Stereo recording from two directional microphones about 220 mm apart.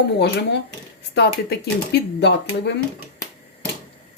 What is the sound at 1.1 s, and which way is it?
Speech, 50° left (ahead or behind).